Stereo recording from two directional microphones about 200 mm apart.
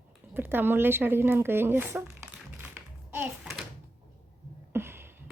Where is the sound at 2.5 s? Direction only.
10° right (ahead or behind).